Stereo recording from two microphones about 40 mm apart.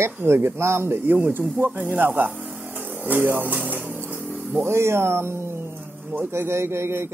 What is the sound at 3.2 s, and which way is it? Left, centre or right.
Speech, right.